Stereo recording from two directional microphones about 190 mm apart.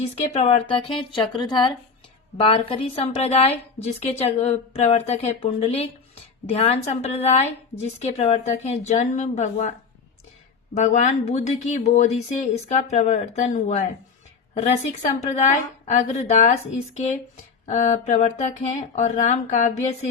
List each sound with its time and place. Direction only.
0.0 s a woman's voice: 35° left (ahead or behind)
10.8 s a woman's voice: 40° left (ahead or behind)
15.0 s a woman's voice: 40° left (ahead or behind)
17.7 s a woman's voice: 40° left (ahead or behind)